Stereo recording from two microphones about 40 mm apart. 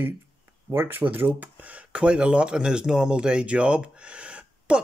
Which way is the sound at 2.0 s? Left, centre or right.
Right.